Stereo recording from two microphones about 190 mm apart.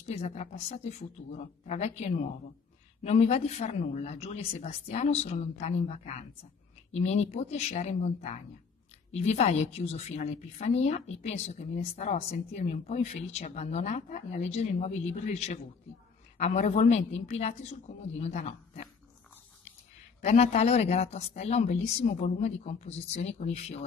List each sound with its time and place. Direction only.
0.0 s a woman's voice: 35° left (ahead or behind)
20.2 s a woman's voice: 35° left (ahead or behind)